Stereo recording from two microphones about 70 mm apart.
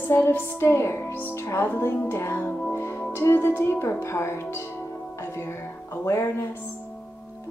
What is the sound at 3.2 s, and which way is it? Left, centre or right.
Speech, left.